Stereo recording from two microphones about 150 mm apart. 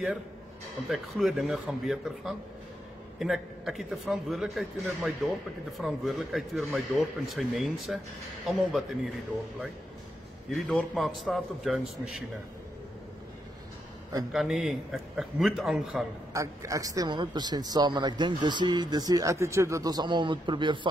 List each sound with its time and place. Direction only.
0.8 s speech: centre (ahead or behind)
10.5 s speech: centre (ahead or behind)
14.3 s speech: centre (ahead or behind)
16.3 s a man's voice: 20° right (ahead or behind)